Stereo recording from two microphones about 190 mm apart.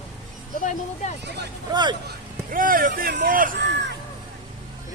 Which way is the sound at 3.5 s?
65° right (ahead or behind).